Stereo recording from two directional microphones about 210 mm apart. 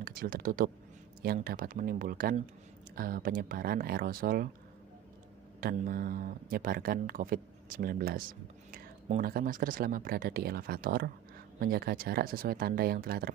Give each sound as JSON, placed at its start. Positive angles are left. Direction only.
{"t": 0.0, "sound": "speech", "side_deg": -40}
{"t": 5.6, "sound": "speech", "side_deg": -45}